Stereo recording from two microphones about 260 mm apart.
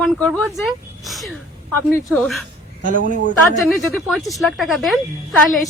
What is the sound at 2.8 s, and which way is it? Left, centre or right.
Speech, right.